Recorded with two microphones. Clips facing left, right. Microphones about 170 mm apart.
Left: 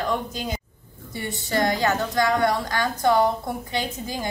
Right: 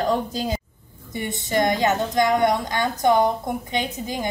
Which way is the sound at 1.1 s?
20° right (ahead or behind).